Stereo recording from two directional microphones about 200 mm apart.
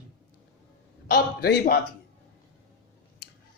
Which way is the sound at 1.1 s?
50° left (ahead or behind).